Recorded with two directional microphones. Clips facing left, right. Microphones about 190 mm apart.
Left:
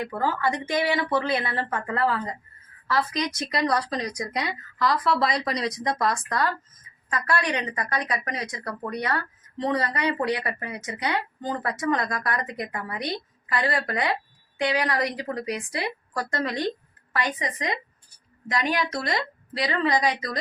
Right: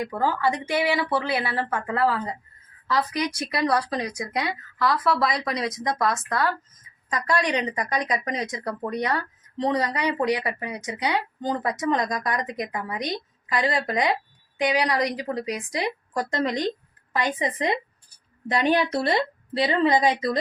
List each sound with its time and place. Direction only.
0.0 s speech: 15° right (ahead or behind)
7.1 s speech: 15° right (ahead or behind)